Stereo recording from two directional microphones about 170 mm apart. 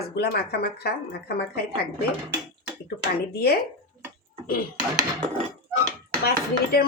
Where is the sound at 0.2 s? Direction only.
70° left (ahead or behind).